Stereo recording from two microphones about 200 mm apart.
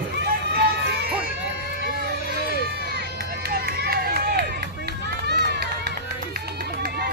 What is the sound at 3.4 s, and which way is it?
Run, 50° right (ahead or behind).